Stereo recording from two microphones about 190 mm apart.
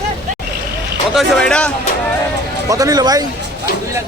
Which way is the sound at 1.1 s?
5° left (ahead or behind).